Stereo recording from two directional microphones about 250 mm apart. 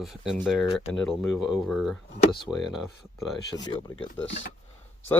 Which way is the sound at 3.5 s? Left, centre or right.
Centre.